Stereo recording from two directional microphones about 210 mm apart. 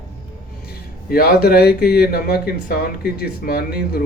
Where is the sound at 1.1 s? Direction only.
45° left (ahead or behind).